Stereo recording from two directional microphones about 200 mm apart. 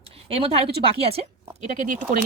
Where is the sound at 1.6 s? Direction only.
40° right (ahead or behind).